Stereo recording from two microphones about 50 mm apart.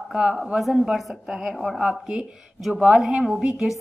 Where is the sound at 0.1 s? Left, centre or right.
Right.